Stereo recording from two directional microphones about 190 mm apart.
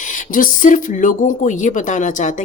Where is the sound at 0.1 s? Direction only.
45° left (ahead or behind).